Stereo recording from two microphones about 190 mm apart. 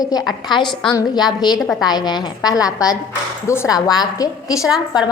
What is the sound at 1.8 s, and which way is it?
A woman's voice, 20° left (ahead or behind).